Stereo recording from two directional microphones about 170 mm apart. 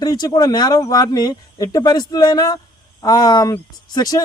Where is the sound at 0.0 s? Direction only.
20° left (ahead or behind).